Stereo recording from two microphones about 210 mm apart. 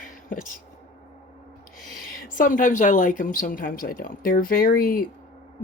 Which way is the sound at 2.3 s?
40° left (ahead or behind).